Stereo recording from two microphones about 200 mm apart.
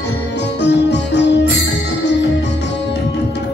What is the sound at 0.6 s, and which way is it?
Music, 60° left (ahead or behind).